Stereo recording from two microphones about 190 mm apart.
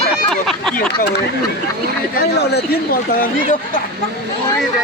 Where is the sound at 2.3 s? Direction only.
55° left (ahead or behind).